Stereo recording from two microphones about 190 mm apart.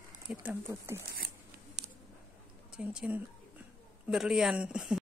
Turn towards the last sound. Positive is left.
turn(degrees=-5)  # may be behind; listen again after turning